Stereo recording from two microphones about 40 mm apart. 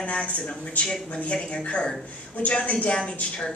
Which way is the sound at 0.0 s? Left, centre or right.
Left.